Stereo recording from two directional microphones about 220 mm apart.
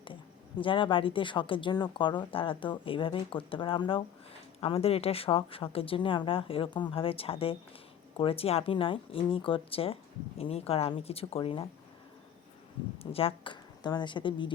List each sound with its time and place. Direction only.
0.6 s speech: 25° left (ahead or behind)
13.0 s speech: 25° left (ahead or behind)